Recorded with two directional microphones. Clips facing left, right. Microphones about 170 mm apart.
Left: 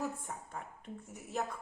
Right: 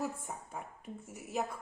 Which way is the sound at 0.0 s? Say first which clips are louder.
Right 1 dB; 5° right (ahead or behind).